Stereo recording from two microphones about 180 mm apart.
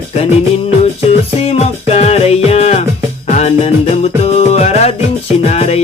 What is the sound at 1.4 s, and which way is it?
Music, 35° left (ahead or behind).